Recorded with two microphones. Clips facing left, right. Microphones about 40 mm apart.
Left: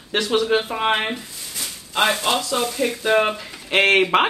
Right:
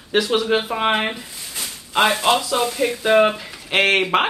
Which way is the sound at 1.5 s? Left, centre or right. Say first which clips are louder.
Right 3 dB; right.